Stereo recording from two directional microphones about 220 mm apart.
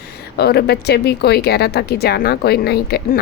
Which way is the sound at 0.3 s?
45° left (ahead or behind).